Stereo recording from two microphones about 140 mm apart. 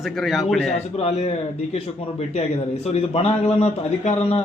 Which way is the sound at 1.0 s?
50° left (ahead or behind).